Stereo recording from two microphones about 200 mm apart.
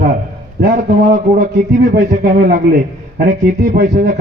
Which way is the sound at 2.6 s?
55° right (ahead or behind).